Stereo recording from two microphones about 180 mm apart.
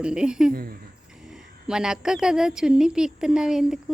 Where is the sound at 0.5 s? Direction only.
55° right (ahead or behind).